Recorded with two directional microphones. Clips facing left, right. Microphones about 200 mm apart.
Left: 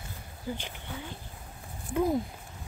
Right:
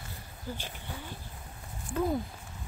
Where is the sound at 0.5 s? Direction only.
20° left (ahead or behind).